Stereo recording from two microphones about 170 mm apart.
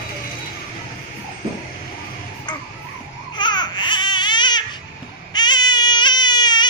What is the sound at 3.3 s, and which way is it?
Baby cry, 25° left (ahead or behind).